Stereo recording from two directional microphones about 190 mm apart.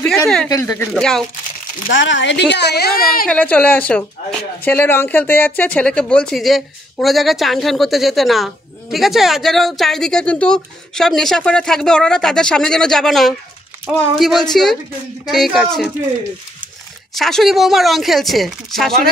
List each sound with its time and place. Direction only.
0.0 s speech: 5° left (ahead or behind)
0.5 s speech: 15° left (ahead or behind)
0.9 s speech: 5° left (ahead or behind)
2.0 s speech: 75° left (ahead or behind); by 3.3 s 50° left (ahead or behind)
3.3 s speech: 5° left (ahead or behind)
17.1 s speech: centre (ahead or behind)